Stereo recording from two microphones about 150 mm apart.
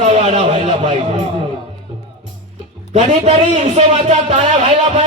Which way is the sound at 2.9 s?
50° right (ahead or behind).